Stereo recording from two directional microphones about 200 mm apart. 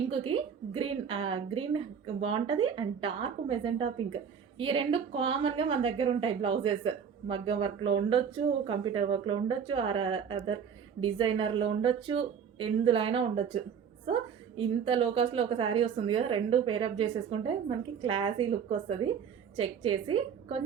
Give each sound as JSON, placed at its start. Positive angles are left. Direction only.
{"t": 0.1, "sound": "a woman's voice", "side_deg": -25}